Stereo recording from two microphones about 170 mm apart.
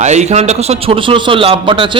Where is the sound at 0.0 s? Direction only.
40° right (ahead or behind).